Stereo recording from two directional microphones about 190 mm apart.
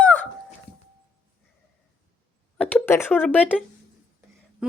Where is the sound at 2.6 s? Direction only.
5° left (ahead or behind).